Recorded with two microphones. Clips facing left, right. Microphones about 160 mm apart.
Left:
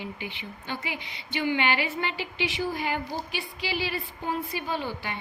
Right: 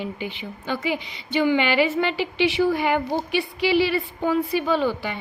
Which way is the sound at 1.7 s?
90° right.